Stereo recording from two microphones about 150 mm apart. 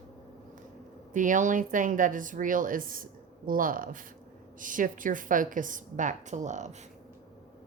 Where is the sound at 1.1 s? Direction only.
60° right (ahead or behind).